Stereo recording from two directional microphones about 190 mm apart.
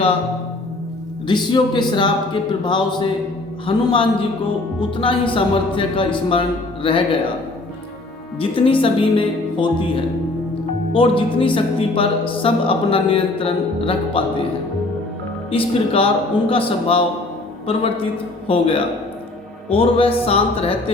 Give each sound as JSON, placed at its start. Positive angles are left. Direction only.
{"t": 1.3, "sound": "speech", "side_deg": 25}
{"t": 8.4, "sound": "speech", "side_deg": 30}
{"t": 15.4, "sound": "speech", "side_deg": 30}